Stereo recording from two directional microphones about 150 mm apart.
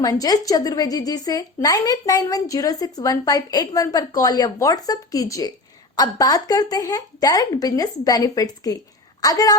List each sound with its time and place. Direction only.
0.0 s speech: 25° left (ahead or behind)